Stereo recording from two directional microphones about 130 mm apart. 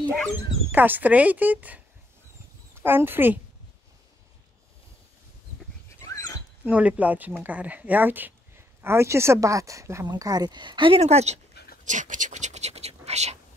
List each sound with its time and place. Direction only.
0.7 s speech: 15° right (ahead or behind)
2.8 s speech: 15° right (ahead or behind)
6.6 s speech: 10° right (ahead or behind); by 11.0 s 40° right (ahead or behind)
11.0 s speech: 55° right (ahead or behind)
11.8 s speech: 75° right (ahead or behind); by 13.4 s 55° right (ahead or behind)